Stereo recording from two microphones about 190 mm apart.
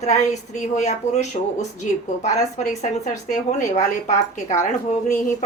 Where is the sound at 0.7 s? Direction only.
40° left (ahead or behind).